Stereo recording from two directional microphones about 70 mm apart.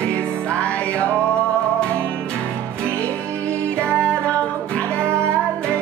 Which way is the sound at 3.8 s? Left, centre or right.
Centre.